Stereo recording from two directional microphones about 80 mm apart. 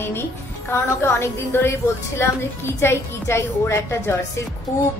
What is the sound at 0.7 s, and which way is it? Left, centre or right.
A woman's voice, left.